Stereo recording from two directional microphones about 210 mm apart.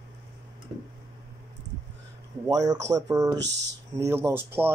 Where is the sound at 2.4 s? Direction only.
15° right (ahead or behind).